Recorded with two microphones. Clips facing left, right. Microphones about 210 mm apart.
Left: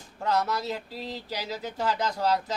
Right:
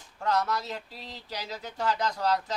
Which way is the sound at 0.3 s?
5° left (ahead or behind).